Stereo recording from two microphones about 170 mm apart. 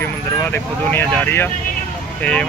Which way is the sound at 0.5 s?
10° left (ahead or behind).